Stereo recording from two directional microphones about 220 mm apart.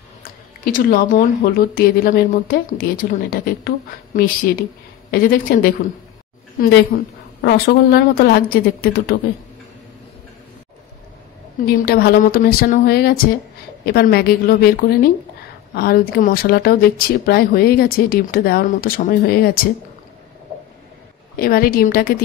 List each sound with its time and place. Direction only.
0.2 s a woman's voice: 40° left (ahead or behind)
6.9 s a woman's voice: 40° left (ahead or behind)
11.6 s speech: 45° left (ahead or behind)
21.4 s speech: 40° left (ahead or behind)